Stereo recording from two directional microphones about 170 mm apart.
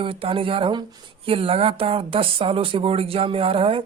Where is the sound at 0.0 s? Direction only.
30° right (ahead or behind).